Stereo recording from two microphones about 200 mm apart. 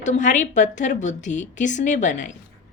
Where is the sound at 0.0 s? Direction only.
35° left (ahead or behind).